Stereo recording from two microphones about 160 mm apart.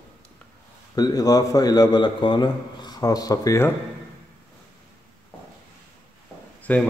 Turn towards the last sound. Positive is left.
turn(degrees=10)  # may be behind; listen again after turning